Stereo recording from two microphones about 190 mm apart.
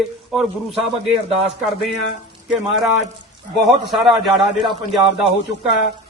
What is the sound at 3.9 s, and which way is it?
A man's voice, centre (ahead or behind).